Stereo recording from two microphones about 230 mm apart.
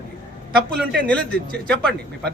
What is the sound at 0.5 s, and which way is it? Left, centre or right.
Speech, right.